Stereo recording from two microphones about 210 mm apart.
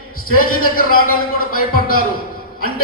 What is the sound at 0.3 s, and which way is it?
Speech, 45° left (ahead or behind).